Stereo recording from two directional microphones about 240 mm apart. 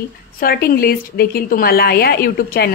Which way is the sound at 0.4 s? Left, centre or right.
Left.